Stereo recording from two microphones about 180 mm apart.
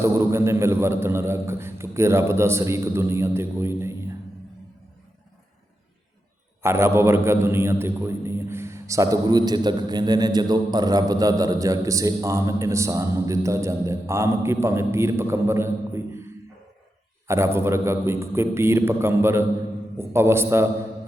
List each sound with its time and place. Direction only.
0.0 s a man's voice: 15° right (ahead or behind)
6.6 s a man's voice: 15° right (ahead or behind)
17.2 s a man's voice: 15° right (ahead or behind)